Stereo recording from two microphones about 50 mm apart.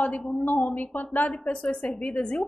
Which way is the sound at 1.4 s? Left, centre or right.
Left.